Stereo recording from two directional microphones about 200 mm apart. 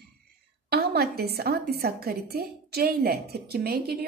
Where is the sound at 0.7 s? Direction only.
50° right (ahead or behind).